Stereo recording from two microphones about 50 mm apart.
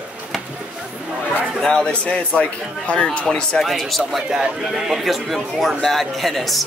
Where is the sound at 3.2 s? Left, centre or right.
Centre.